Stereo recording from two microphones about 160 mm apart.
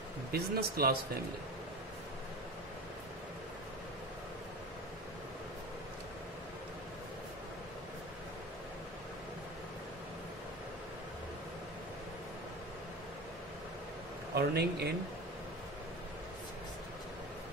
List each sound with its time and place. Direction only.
0.3 s speech: 70° right (ahead or behind)
14.3 s speech: 90° right